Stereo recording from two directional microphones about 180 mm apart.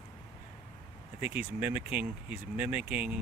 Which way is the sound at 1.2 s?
10° right (ahead or behind).